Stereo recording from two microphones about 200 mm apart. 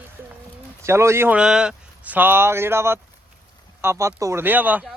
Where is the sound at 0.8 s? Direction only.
15° right (ahead or behind).